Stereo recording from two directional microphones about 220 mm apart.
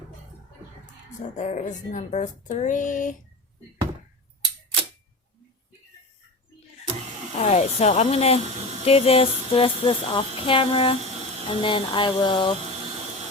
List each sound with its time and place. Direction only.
1.4 s speech: 35° left (ahead or behind)
7.3 s music: 30° left (ahead or behind)